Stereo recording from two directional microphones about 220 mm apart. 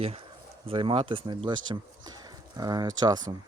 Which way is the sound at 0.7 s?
25° right (ahead or behind).